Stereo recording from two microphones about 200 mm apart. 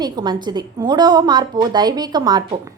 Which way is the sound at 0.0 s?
20° right (ahead or behind).